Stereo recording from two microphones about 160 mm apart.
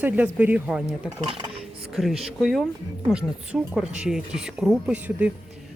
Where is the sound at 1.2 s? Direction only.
35° right (ahead or behind).